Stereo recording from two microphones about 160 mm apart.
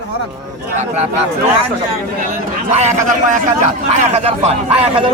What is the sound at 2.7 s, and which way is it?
A man's voice, 45° right (ahead or behind).